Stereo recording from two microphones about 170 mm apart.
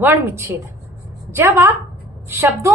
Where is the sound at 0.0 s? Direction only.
15° right (ahead or behind).